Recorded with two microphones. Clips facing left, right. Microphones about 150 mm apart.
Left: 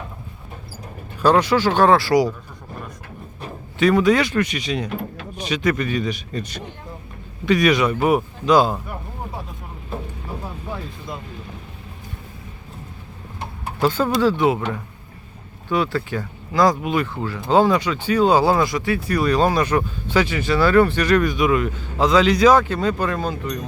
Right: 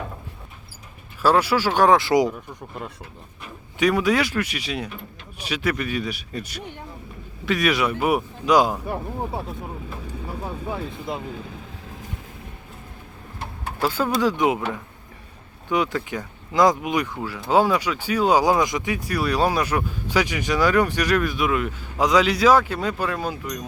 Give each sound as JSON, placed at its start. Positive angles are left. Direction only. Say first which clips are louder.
{"t": 1.2, "sound": "speech", "louder": "left 3 dB", "side_deg": -10}
{"t": 3.8, "sound": "speech", "louder": "left 4 dB", "side_deg": -10}
{"t": 13.8, "sound": "speech", "louder": "left 3 dB", "side_deg": -10}
{"t": 15.7, "sound": "speech", "louder": "left 2 dB", "side_deg": -15}